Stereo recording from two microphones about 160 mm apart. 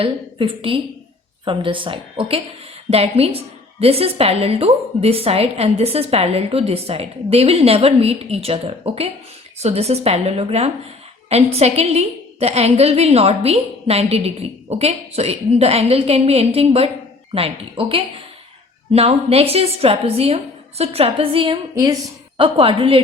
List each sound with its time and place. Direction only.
0.0 s a woman's voice: 35° right (ahead or behind)